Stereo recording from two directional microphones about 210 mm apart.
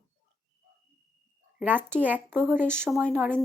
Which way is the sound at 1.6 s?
10° right (ahead or behind).